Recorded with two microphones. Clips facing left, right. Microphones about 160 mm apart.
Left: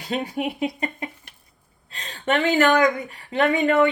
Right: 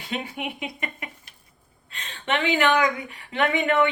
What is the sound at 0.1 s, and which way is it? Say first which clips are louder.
Speech: left 6 dB; 40° left (ahead or behind).